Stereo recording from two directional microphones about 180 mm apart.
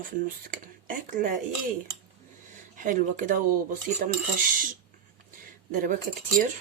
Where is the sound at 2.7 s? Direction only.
50° right (ahead or behind).